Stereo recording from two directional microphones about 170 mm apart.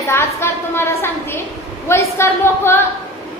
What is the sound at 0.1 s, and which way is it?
A woman's voice, 15° left (ahead or behind).